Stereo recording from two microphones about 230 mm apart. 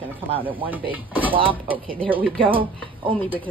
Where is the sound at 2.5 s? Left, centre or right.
Right.